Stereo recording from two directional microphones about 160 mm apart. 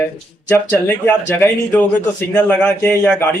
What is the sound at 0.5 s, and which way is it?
Speech, 10° left (ahead or behind).